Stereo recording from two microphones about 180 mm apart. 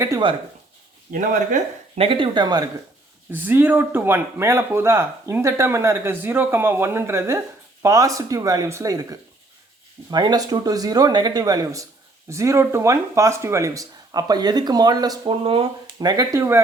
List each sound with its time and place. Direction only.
0.0 s speech: 20° right (ahead or behind)
1.1 s speech: 50° right (ahead or behind)
2.0 s speech: 30° right (ahead or behind)
3.3 s speech: 10° right (ahead or behind)